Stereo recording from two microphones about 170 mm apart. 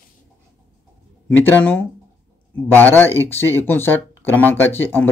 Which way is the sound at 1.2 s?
10° left (ahead or behind).